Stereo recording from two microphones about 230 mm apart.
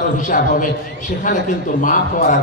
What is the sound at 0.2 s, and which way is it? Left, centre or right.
A man's voice, left.